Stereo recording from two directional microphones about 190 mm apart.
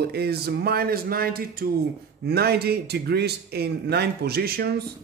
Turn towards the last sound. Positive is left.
turn(degrees=-55)  # may be behind; listen again after turning